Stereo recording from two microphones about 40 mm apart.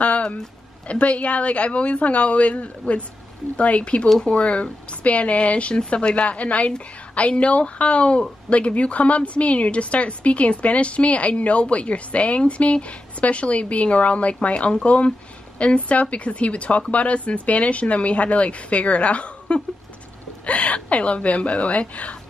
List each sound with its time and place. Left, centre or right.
0.0 s a sound: left
0.8 s speech: left
20.4 s speech: left